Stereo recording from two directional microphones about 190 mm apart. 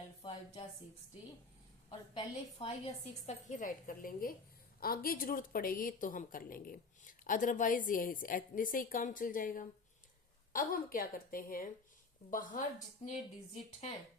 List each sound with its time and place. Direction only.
0.2 s speech: 25° left (ahead or behind)
1.9 s a woman's voice: 25° left (ahead or behind); by 12.6 s 45° left (ahead or behind)
13.0 s a woman's voice: 30° left (ahead or behind)